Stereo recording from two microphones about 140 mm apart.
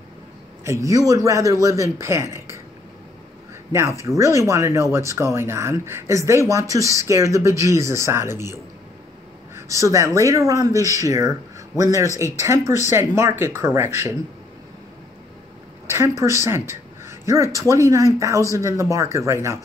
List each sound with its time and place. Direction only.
0.7 s speech: 20° right (ahead or behind)
4.0 s speech: 20° right (ahead or behind)
9.6 s speech: 20° right (ahead or behind)
15.9 s speech: 20° right (ahead or behind)
16.4 s a sound: 20° right (ahead or behind)
17.6 s speech: 20° right (ahead or behind)